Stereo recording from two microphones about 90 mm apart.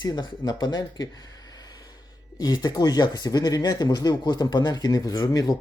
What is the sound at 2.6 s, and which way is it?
A man's voice, 45° left (ahead or behind).